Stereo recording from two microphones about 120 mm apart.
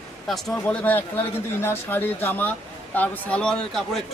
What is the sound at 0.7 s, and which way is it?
A man's voice, 15° left (ahead or behind).